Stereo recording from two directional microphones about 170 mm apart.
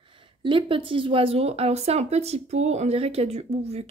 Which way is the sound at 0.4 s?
30° right (ahead or behind).